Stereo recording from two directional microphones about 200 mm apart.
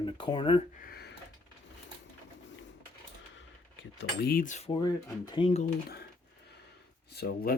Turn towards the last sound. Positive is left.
turn(degrees=50)  # may be behind; listen again after turning